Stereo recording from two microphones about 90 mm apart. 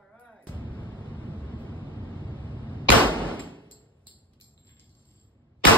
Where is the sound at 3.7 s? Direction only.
70° left (ahead or behind).